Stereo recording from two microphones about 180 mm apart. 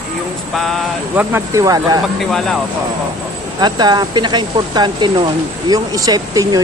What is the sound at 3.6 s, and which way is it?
Speech, 25° right (ahead or behind).